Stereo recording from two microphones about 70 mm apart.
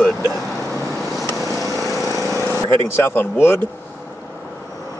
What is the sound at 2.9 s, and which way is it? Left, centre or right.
Speech, left.